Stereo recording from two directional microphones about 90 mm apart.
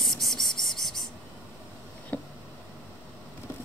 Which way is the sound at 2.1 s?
15° left (ahead or behind).